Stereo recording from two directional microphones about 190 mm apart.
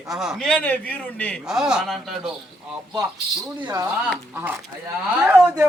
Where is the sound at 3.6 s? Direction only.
20° right (ahead or behind).